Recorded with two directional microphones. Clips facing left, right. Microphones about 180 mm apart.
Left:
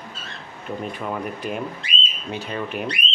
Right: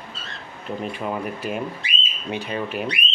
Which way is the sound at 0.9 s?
10° right (ahead or behind).